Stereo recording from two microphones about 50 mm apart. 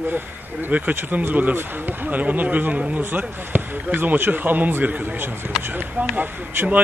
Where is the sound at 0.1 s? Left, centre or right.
Right.